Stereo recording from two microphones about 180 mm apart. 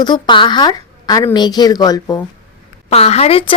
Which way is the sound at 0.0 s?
25° left (ahead or behind).